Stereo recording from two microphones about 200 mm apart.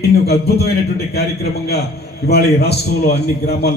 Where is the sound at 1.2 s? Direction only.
50° left (ahead or behind).